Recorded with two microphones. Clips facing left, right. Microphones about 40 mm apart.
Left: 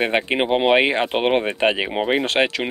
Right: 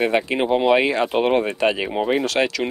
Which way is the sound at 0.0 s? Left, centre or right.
Left.